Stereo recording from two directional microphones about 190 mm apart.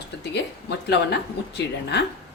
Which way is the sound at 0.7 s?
60° left (ahead or behind).